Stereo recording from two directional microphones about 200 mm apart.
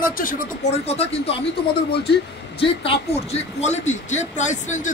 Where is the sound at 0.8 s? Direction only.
30° left (ahead or behind).